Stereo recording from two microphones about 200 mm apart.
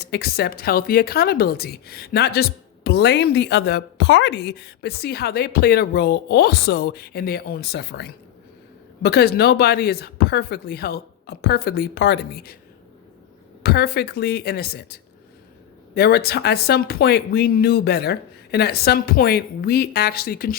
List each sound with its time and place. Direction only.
0.0 s speech: 50° left (ahead or behind)
13.6 s speech: 50° left (ahead or behind)